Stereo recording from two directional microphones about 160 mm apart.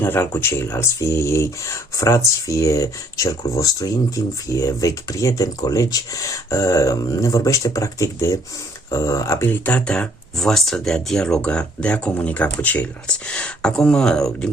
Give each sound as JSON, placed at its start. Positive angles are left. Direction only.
{"t": 0.0, "sound": "speech", "side_deg": 15}